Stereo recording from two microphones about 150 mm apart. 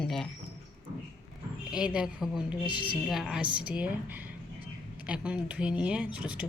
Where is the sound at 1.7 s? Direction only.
5° right (ahead or behind).